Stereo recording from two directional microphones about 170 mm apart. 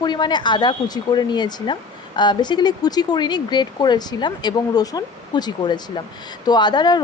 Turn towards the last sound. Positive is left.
turn(degrees=25)  # may be behind; listen again after turning